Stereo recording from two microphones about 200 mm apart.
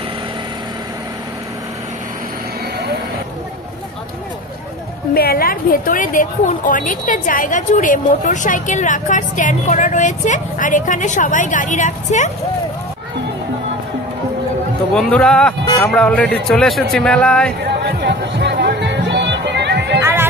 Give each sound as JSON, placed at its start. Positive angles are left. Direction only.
{"t": 5.1, "sound": "a woman's voice", "side_deg": 50}
{"t": 15.0, "sound": "a man's voice", "side_deg": 5}
{"t": 15.6, "sound": "speech", "side_deg": 20}
{"t": 15.9, "sound": "a man's voice", "side_deg": 5}
{"t": 17.6, "sound": "music", "side_deg": -55}
{"t": 20.0, "sound": "music", "side_deg": -10}